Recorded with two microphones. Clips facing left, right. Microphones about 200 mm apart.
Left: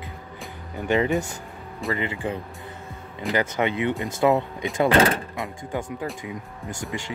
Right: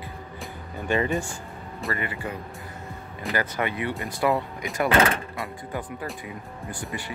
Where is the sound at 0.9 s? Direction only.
20° left (ahead or behind).